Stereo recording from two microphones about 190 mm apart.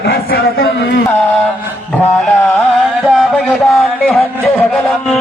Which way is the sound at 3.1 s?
Centre (ahead or behind).